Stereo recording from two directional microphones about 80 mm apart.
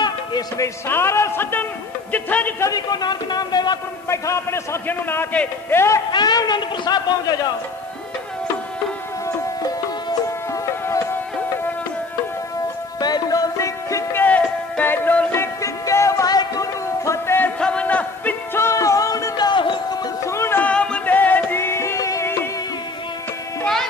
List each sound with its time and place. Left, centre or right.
0.8 s a man's voice: left
2.7 s a man's voice: left
4.1 s a man's voice: left
6.1 s a man's voice: left
10.5 s music: left
13.0 s music: left
14.1 s music: left
15.3 s music: left
17.0 s a sound: left
17.6 s music: centre
18.6 s music: left
19.3 s music: left
20.2 s music: left
20.6 s music: centre; by 22.3 s left